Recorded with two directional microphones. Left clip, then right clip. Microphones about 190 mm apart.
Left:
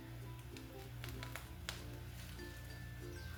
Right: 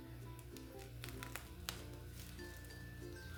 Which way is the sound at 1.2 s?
30° right (ahead or behind).